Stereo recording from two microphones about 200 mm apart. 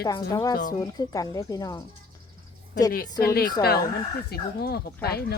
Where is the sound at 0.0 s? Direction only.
20° left (ahead or behind).